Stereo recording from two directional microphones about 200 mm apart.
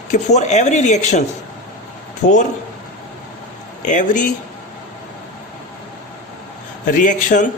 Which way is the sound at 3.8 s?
40° left (ahead or behind).